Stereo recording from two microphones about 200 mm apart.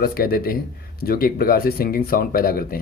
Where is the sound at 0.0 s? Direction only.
50° left (ahead or behind).